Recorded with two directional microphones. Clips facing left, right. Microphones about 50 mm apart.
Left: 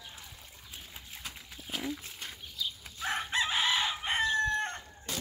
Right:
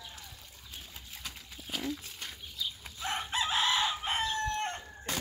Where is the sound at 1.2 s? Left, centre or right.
Centre.